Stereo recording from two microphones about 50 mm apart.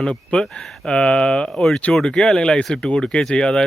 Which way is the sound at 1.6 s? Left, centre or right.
Centre.